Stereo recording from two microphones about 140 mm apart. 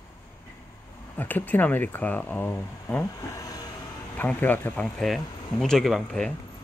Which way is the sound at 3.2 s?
25° left (ahead or behind).